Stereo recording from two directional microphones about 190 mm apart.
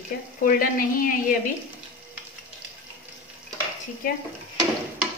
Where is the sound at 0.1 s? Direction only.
60° left (ahead or behind).